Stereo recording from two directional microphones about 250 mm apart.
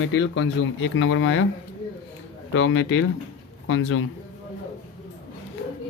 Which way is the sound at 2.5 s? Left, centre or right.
Left.